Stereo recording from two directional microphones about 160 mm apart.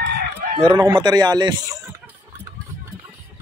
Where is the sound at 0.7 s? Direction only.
25° right (ahead or behind).